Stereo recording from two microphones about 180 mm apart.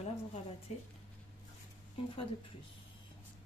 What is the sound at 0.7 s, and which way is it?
Speech, 35° left (ahead or behind).